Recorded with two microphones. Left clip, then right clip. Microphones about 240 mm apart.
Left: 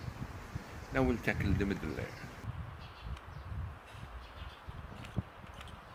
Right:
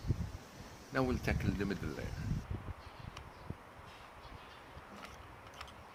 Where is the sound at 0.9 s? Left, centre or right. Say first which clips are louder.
Left 3 dB; centre.